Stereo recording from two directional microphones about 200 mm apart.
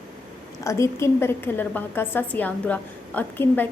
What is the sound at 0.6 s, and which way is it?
A woman's voice, 15° left (ahead or behind).